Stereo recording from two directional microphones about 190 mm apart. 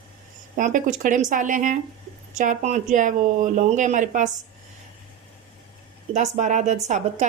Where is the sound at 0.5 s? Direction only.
45° right (ahead or behind).